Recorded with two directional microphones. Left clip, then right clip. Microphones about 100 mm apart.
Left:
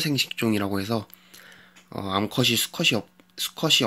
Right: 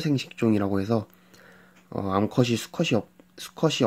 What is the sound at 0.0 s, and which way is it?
Speech, 35° right (ahead or behind).